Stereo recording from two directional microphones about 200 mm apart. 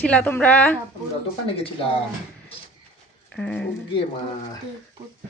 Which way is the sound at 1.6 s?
25° left (ahead or behind).